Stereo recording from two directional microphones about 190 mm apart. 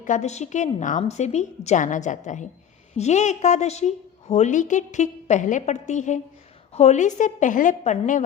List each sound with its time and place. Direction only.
0.0 s a woman's voice: 40° left (ahead or behind)